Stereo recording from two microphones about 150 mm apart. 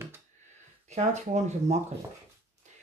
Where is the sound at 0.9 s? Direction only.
50° right (ahead or behind).